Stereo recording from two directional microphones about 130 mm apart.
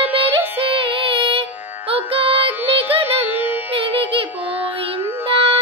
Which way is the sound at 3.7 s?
40° right (ahead or behind).